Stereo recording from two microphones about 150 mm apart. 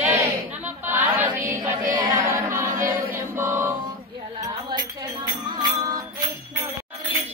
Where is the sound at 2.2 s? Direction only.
20° right (ahead or behind).